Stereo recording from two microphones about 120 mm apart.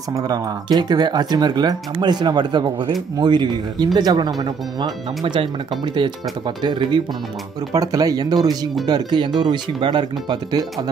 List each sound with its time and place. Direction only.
0.1 s speech: 35° right (ahead or behind)